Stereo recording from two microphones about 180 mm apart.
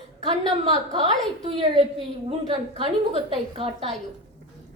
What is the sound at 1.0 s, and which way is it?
A woman's voice, 30° right (ahead or behind).